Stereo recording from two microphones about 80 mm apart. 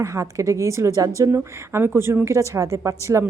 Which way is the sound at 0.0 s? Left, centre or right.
Right.